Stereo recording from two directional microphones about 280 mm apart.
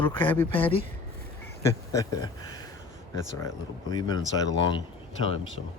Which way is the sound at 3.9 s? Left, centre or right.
Centre.